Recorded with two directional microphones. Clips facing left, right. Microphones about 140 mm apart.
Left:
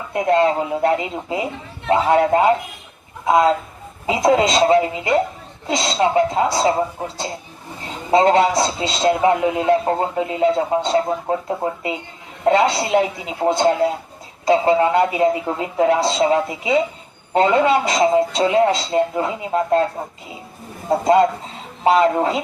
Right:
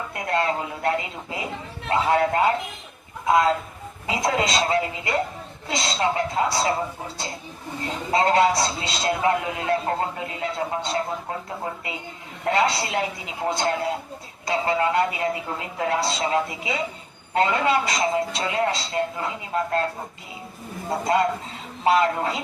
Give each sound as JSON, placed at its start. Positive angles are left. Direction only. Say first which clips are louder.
{"t": 0.1, "sound": "a man's voice", "louder": "left 9 dB", "side_deg": 25}
{"t": 8.1, "sound": "a man's voice", "louder": "left 5 dB", "side_deg": 25}
{"t": 12.5, "sound": "a man's voice", "louder": "left 7 dB", "side_deg": 25}
{"t": 21.8, "sound": "a man's voice", "louder": "left 5 dB", "side_deg": 25}